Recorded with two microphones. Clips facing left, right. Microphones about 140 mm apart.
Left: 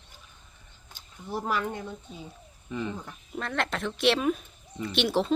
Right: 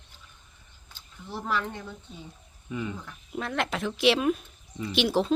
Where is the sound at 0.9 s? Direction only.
15° left (ahead or behind).